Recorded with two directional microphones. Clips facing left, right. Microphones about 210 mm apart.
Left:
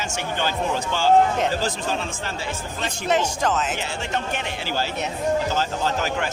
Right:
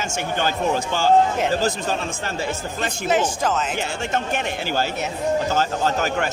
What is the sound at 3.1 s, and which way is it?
Speech, centre (ahead or behind).